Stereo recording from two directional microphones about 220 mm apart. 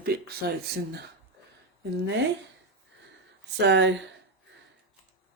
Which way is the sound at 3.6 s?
50° right (ahead or behind).